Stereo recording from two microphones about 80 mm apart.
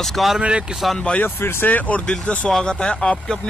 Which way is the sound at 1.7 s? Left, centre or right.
Centre.